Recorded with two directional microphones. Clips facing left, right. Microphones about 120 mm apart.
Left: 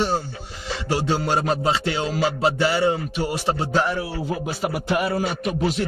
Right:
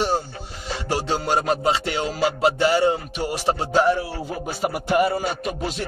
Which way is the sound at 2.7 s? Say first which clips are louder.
Right 1 dB; 25° right (ahead or behind).